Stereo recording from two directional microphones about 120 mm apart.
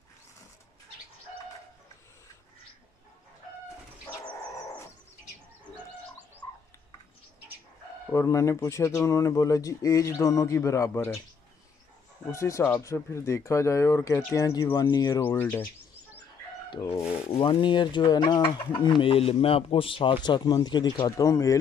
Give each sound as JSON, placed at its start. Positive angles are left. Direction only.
{"t": 8.1, "sound": "speech", "side_deg": 25}
{"t": 12.3, "sound": "speech", "side_deg": 25}
{"t": 15.3, "sound": "speech", "side_deg": 15}
{"t": 17.3, "sound": "speech", "side_deg": 45}
{"t": 21.2, "sound": "speech", "side_deg": 25}